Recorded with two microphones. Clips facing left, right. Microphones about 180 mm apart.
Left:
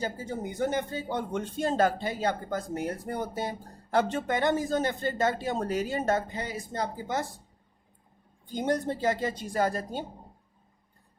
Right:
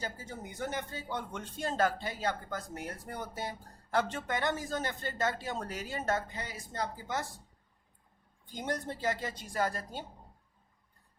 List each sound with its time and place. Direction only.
0.0 s speech: 20° left (ahead or behind)
8.4 s speech: 20° left (ahead or behind)